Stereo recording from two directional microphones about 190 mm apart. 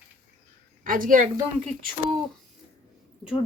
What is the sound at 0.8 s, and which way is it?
Speech, 45° right (ahead or behind).